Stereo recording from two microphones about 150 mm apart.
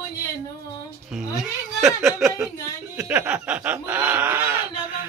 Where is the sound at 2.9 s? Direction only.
10° right (ahead or behind).